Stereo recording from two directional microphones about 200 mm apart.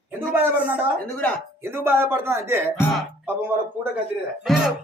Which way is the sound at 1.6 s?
10° right (ahead or behind).